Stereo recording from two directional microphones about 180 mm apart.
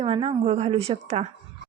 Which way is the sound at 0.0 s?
30° right (ahead or behind).